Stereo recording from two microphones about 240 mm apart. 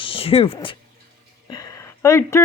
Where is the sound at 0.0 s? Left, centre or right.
Left.